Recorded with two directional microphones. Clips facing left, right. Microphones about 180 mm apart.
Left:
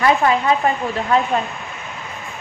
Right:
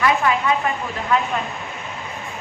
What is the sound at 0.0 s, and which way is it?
A woman's voice, 35° left (ahead or behind).